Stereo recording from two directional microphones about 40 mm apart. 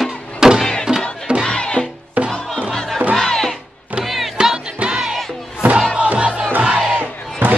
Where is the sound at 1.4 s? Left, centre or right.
Left.